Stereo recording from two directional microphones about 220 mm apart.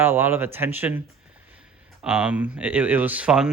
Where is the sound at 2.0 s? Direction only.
5° right (ahead or behind).